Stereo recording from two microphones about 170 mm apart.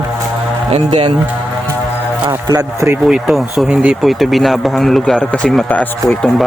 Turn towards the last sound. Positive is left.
turn(degrees=5)  # may be behind; listen again after turning